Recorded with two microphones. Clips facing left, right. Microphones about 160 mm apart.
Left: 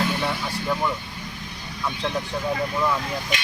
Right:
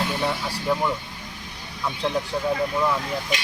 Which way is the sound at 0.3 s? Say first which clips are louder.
Right 1 dB; 10° right (ahead or behind).